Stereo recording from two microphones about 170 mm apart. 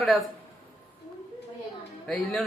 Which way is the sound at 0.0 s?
Centre (ahead or behind).